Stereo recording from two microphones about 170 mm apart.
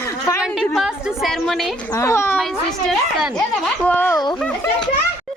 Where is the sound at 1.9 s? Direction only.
15° left (ahead or behind).